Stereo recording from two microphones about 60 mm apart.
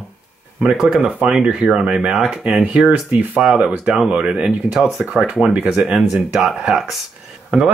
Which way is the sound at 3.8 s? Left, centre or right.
Centre.